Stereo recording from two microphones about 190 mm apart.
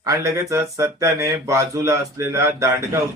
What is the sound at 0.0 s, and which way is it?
Speech, 15° right (ahead or behind).